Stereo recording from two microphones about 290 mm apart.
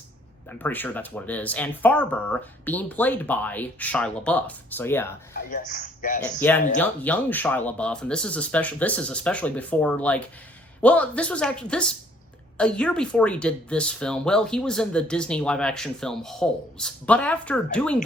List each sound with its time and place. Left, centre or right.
0.6 s speech: centre
5.5 s a man's voice: left
6.4 s speech: centre